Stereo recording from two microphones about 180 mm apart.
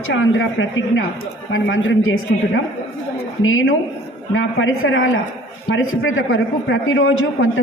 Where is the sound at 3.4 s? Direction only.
90° left.